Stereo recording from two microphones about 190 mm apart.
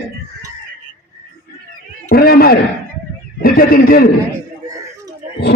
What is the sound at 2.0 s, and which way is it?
A man's voice, 55° left (ahead or behind).